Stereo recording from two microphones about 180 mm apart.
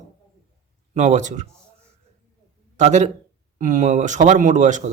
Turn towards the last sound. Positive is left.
turn(degrees=-45)  # may be behind; listen again after turning